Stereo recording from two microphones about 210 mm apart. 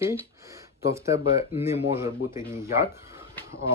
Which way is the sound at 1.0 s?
15° right (ahead or behind).